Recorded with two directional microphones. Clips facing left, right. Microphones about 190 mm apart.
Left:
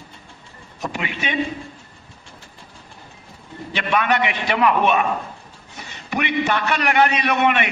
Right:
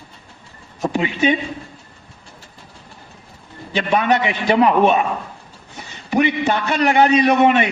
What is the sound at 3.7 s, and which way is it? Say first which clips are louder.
A man's voice: right 3 dB; 30° right (ahead or behind).